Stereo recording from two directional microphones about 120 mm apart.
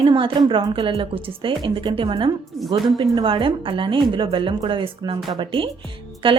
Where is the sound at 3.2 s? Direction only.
40° right (ahead or behind).